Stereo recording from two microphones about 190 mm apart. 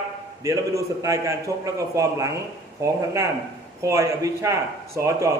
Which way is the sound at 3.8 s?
15° right (ahead or behind).